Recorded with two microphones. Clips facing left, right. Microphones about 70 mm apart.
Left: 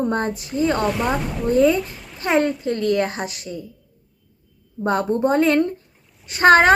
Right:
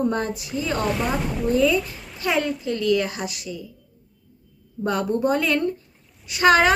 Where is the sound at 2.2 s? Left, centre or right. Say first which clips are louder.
Left 4 dB; left.